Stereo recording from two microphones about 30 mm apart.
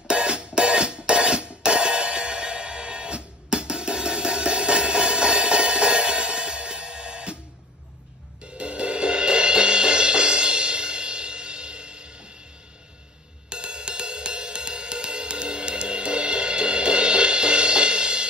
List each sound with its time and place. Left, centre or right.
0.1 s music: right
8.5 s music: right
13.5 s music: right